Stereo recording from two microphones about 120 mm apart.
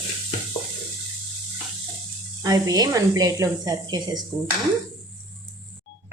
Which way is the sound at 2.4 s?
35° right (ahead or behind).